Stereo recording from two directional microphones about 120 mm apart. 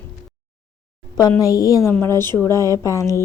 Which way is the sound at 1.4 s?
30° left (ahead or behind).